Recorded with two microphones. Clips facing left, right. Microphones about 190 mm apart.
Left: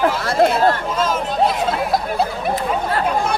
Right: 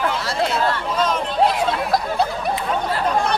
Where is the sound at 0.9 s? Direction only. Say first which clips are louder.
Left 1 dB; 5° left (ahead or behind).